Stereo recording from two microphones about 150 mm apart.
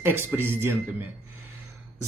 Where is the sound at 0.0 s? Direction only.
15° right (ahead or behind).